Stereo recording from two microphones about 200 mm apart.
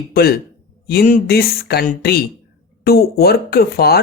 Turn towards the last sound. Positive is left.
turn(degrees=50)  # may be behind; listen again after turning